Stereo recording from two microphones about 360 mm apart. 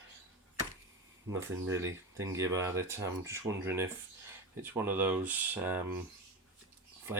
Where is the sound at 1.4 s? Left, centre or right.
Centre.